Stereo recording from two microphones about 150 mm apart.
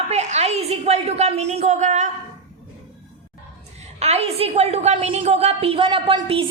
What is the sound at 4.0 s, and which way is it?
A woman's voice, 45° right (ahead or behind).